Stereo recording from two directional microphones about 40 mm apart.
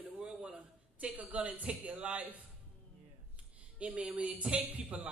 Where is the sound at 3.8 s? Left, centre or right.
Right.